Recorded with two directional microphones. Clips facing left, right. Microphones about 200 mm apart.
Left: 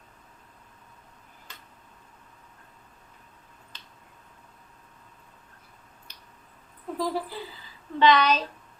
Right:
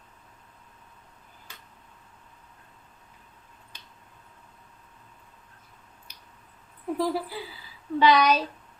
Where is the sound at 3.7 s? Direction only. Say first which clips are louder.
Even; 10° right (ahead or behind).